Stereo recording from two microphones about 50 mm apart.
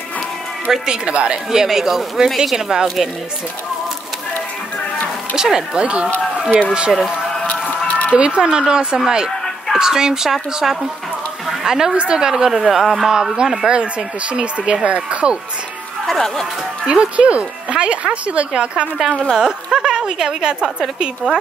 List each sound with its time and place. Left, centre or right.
0.7 s a woman's voice: centre
1.0 s speech: right
1.5 s a woman's voice: centre
5.3 s a woman's voice: centre
7.9 s a sound: left
8.2 s a woman's voice: centre
13.7 s speech: right
16.1 s speech: centre
16.8 s a woman's voice: centre